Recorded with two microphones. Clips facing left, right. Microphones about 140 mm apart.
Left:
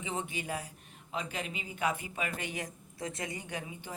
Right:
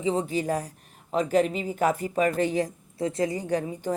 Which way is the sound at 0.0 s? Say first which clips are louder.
Right 12 dB; 35° right (ahead or behind).